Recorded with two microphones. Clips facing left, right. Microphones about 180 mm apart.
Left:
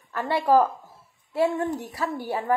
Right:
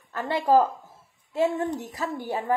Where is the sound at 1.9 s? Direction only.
20° right (ahead or behind).